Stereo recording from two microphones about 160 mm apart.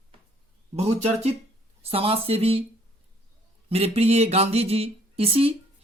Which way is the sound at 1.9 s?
35° right (ahead or behind).